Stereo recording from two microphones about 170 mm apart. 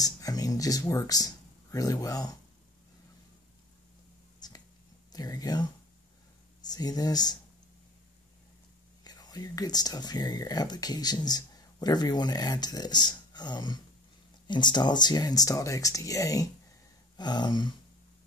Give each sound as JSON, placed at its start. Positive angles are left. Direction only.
{"t": 0.0, "sound": "speech", "side_deg": 20}
{"t": 5.1, "sound": "speech", "side_deg": 20}
{"t": 6.7, "sound": "speech", "side_deg": 20}
{"t": 9.0, "sound": "speech", "side_deg": 25}